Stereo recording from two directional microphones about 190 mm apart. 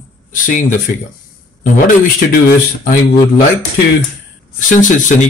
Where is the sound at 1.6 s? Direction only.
50° left (ahead or behind).